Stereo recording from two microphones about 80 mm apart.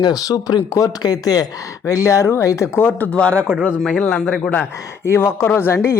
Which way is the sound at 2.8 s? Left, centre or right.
Centre.